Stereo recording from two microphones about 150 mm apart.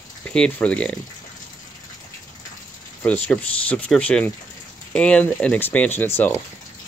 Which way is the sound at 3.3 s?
10° left (ahead or behind).